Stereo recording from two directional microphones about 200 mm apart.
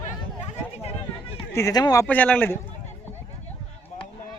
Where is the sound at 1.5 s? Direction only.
15° left (ahead or behind).